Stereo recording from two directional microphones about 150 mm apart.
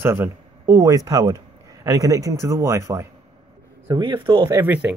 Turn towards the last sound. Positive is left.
turn(degrees=-10)  # may be behind; listen again after turning